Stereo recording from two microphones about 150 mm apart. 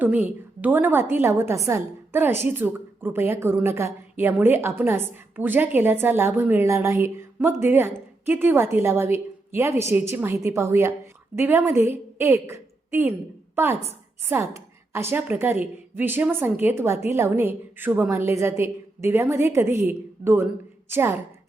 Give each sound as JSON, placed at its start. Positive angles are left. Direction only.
{"t": 0.0, "sound": "a woman's voice", "side_deg": -10}